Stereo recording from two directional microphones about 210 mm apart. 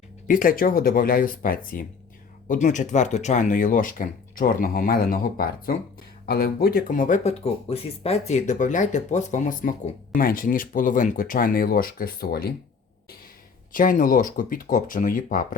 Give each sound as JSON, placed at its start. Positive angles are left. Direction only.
{"t": 0.3, "sound": "speech", "side_deg": 40}
{"t": 13.7, "sound": "speech", "side_deg": 40}